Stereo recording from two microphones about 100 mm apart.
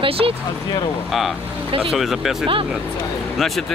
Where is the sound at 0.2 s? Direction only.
55° right (ahead or behind).